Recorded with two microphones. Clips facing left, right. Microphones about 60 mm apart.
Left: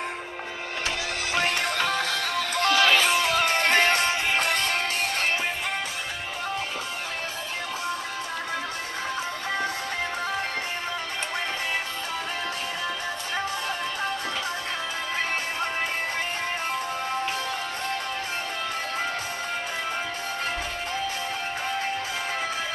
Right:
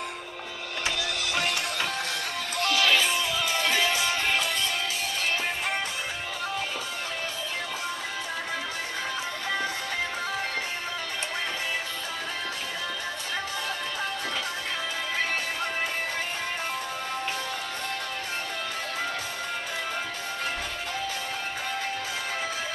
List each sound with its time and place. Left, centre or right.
0.8 s music: left
3.0 s music: left